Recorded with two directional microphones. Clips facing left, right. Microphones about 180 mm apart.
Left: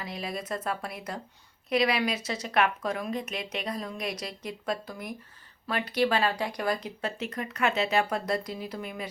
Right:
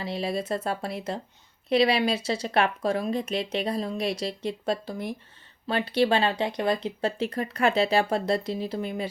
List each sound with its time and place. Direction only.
0.0 s speech: 30° right (ahead or behind)